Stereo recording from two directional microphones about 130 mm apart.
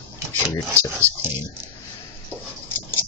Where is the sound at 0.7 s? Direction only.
20° right (ahead or behind).